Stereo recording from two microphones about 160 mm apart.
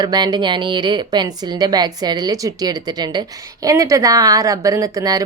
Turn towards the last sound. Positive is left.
turn(degrees=-20)  # may be behind; listen again after turning